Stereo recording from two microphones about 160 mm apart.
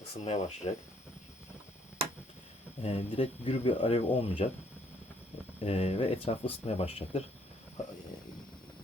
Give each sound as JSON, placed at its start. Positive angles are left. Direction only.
{"t": 0.3, "sound": "speech", "side_deg": 45}
{"t": 2.8, "sound": "speech", "side_deg": 35}
{"t": 5.5, "sound": "speech", "side_deg": 40}